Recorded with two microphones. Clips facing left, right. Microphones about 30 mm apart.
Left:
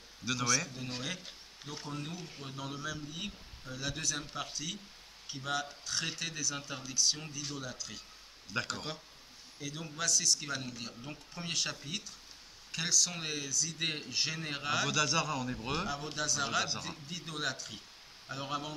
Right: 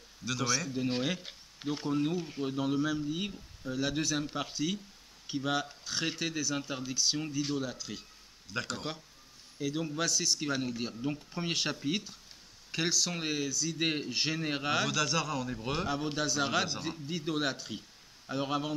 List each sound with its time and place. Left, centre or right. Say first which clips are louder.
0.2 s a man's voice: right 1 dB; centre
0.8 s a man's voice: right 7 dB; right
8.5 s speech: right 1 dB; centre
9.6 s a man's voice: right 6 dB; centre
14.9 s speech: even; centre
15.9 s a man's voice: right 4 dB; centre